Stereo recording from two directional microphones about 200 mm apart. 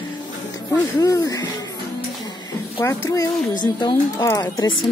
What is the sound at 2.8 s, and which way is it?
A woman's voice, 15° left (ahead or behind).